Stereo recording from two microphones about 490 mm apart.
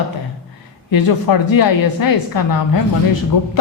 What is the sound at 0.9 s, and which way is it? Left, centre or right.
A woman's voice, left.